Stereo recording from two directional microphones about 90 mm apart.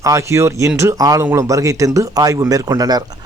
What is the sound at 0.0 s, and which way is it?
A man's voice, 35° right (ahead or behind).